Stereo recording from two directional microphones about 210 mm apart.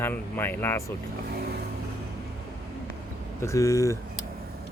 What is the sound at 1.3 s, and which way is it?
Vehicle, 50° right (ahead or behind).